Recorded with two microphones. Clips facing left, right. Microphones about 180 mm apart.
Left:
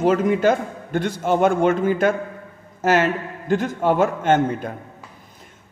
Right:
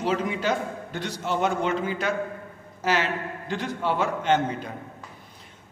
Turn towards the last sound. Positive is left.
turn(degrees=50)  # may be behind; listen again after turning